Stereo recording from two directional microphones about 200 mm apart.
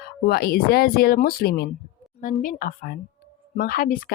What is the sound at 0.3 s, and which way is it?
Speech, 50° left (ahead or behind).